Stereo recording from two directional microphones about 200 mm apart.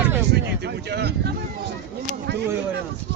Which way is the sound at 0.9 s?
55° right (ahead or behind).